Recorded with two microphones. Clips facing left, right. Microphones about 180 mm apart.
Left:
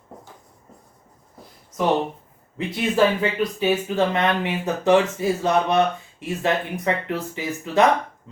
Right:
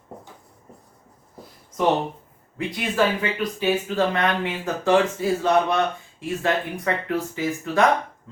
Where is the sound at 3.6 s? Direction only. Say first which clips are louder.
Even; 20° left (ahead or behind).